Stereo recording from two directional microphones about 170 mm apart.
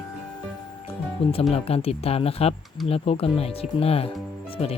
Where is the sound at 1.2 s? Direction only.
35° left (ahead or behind).